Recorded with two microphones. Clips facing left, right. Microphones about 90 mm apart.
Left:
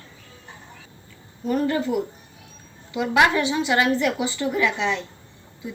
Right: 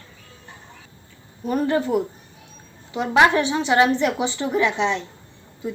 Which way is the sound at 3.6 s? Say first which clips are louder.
Right 5 dB; 25° right (ahead or behind).